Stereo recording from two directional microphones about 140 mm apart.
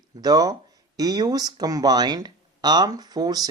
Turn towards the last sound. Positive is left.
turn(degrees=-30)  # may be behind; listen again after turning